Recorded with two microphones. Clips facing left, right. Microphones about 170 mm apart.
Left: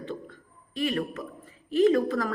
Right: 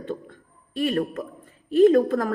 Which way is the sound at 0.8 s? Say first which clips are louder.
Right 4 dB; 45° right (ahead or behind).